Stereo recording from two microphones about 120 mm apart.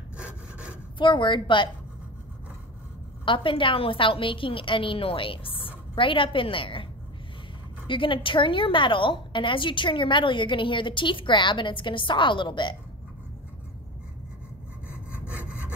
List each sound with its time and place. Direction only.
0.2 s sawing: 10° right (ahead or behind)
0.9 s a woman's voice: 40° left (ahead or behind)
3.3 s a woman's voice: 45° left (ahead or behind)